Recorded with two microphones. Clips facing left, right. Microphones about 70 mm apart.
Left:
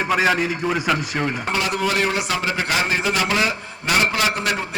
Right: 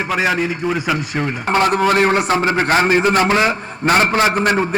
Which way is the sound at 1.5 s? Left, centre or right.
Right.